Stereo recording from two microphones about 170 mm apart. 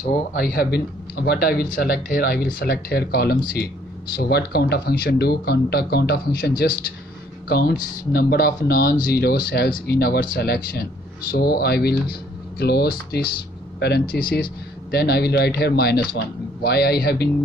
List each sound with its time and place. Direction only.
0.0 s speech: 50° left (ahead or behind); by 17.3 s 70° left (ahead or behind)